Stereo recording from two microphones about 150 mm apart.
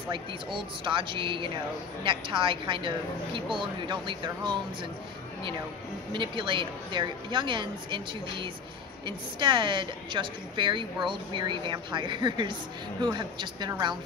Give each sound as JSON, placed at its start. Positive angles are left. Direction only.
{"t": 0.1, "sound": "a woman's voice", "side_deg": -35}
{"t": 6.1, "sound": "a woman's voice", "side_deg": -35}